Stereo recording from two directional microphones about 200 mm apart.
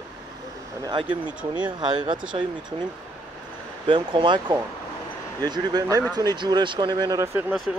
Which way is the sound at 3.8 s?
25° right (ahead or behind).